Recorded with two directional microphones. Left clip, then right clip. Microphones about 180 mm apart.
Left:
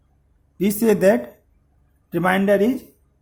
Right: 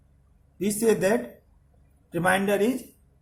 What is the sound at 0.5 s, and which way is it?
Speech, 50° left (ahead or behind).